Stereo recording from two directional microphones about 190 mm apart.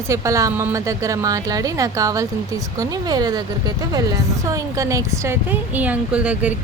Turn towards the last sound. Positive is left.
turn(degrees=-5)  # may be behind; listen again after turning